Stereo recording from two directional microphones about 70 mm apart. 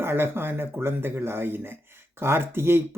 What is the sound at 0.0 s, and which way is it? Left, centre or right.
Speech, right.